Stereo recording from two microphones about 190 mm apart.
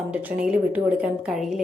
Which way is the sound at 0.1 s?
5° right (ahead or behind).